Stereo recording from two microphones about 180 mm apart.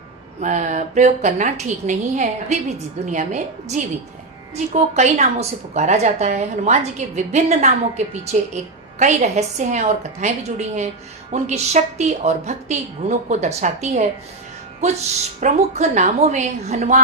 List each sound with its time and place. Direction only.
0.4 s a woman's voice: 45° right (ahead or behind)
15.4 s a woman's voice: 40° right (ahead or behind)